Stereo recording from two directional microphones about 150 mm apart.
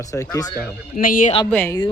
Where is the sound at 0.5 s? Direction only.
80° left.